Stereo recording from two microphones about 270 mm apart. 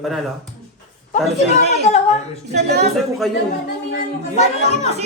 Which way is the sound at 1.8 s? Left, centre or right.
Left.